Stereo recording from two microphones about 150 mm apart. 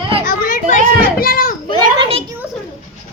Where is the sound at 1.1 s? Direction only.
75° left (ahead or behind).